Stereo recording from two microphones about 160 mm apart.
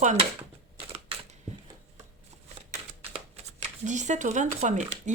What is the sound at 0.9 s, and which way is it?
Camera, 40° right (ahead or behind).